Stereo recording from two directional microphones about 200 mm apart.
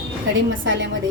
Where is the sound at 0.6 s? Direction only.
65° right (ahead or behind).